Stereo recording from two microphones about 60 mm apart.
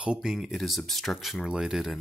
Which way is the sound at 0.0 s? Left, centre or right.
Centre.